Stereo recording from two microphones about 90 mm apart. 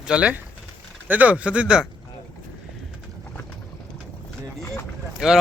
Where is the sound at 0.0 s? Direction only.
10° right (ahead or behind).